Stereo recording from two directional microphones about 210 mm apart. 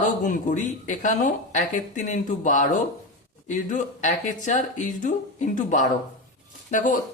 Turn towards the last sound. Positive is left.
turn(degrees=40)  # may be behind; listen again after turning